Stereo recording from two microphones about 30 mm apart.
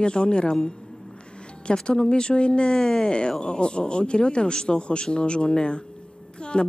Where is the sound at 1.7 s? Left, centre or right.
Left.